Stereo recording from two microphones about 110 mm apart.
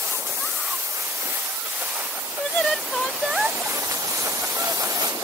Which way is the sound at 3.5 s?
25° right (ahead or behind).